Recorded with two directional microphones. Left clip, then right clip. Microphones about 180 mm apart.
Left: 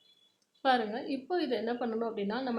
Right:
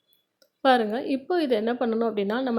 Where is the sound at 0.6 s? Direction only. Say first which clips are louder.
Right 8 dB; 35° right (ahead or behind).